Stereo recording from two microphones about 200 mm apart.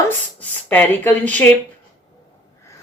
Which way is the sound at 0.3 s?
10° left (ahead or behind).